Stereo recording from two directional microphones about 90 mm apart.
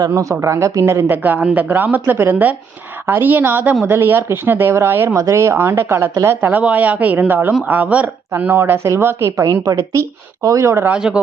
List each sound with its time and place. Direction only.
0.1 s speech: 35° right (ahead or behind)
10.8 s speech: 10° right (ahead or behind)